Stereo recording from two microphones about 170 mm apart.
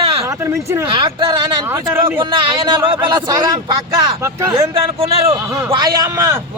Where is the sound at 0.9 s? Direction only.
25° right (ahead or behind).